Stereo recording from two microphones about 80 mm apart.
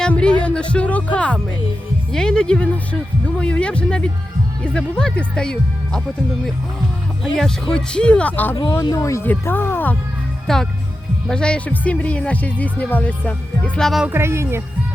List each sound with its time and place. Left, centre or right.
0.0 s speech: centre
7.3 s speech: centre
8.7 s speech: left
9.2 s speech: left
10.4 s speech: centre
13.7 s speech: centre
14.1 s speech: right